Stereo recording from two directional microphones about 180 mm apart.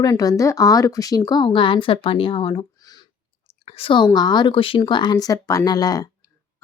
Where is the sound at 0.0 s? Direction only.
20° left (ahead or behind).